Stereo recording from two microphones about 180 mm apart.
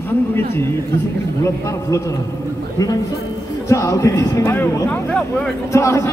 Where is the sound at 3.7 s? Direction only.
15° left (ahead or behind).